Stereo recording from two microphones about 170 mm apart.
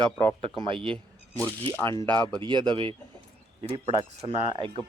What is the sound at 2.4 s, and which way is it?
Speech, 25° right (ahead or behind).